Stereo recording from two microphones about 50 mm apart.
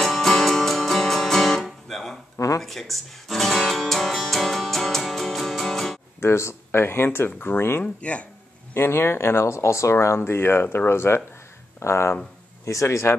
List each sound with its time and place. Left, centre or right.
0.0 s music: centre
2.3 s a sound: left
2.6 s guitar: centre
6.2 s speech: left
7.2 s speech: left
7.8 s speech: left
8.7 s speech: left